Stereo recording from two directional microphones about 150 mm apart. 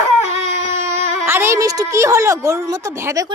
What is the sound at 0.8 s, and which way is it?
Speech, 15° right (ahead or behind).